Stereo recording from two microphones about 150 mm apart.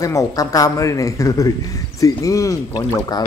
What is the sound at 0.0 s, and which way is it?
A woman's voice, 20° left (ahead or behind).